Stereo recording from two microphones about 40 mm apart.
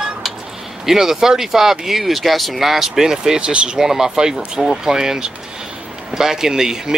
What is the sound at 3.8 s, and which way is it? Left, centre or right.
Speech, centre.